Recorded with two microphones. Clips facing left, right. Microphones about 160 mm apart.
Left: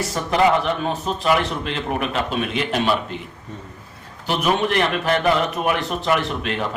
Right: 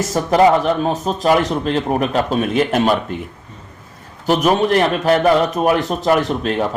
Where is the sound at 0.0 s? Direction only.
40° right (ahead or behind).